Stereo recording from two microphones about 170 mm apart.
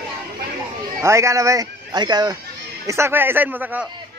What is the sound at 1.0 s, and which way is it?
Speech, 15° right (ahead or behind).